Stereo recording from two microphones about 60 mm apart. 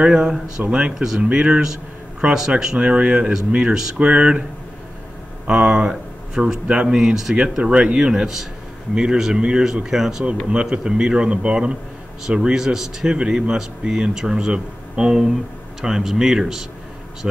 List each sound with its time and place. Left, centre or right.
0.0 s speech: centre
5.5 s speech: centre